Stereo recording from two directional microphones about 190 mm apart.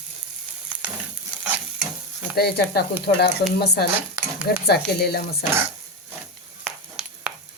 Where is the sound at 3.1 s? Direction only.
40° left (ahead or behind).